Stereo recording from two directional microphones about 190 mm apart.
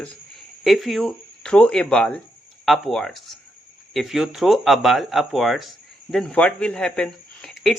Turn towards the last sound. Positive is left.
turn(degrees=0)  # may be behind; listen again after turning